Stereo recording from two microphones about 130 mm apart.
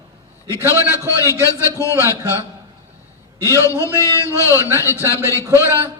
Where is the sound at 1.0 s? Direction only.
20° left (ahead or behind).